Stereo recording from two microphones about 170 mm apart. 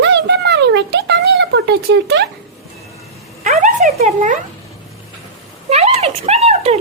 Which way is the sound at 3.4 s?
45° right (ahead or behind).